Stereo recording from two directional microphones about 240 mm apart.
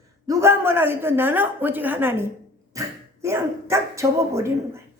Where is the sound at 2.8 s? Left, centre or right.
Centre.